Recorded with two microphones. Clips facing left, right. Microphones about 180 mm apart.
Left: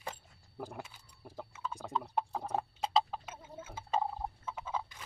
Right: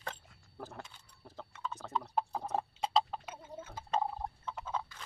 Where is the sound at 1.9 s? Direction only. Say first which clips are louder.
Right 1 dB; centre (ahead or behind).